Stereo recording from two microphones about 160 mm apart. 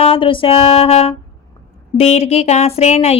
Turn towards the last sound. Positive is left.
turn(degrees=40)  # may be behind; listen again after turning